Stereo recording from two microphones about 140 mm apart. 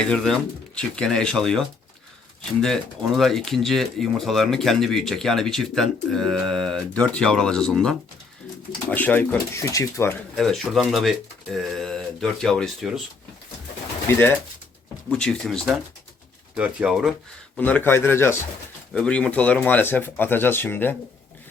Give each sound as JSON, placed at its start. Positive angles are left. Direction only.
{"t": 0.0, "sound": "speech", "side_deg": 5}
{"t": 10.3, "sound": "speech", "side_deg": 0}
{"t": 14.1, "sound": "speech", "side_deg": 15}
{"t": 17.6, "sound": "speech", "side_deg": 10}
{"t": 18.9, "sound": "speech", "side_deg": 5}